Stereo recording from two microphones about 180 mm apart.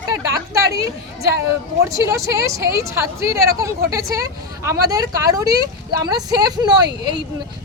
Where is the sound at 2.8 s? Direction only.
15° right (ahead or behind).